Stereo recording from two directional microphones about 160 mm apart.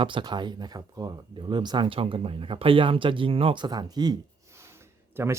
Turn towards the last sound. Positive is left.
turn(degrees=-15)  # may be behind; listen again after turning